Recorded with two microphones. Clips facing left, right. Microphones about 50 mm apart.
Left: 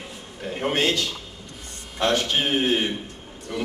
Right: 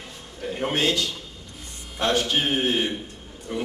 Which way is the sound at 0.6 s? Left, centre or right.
Left.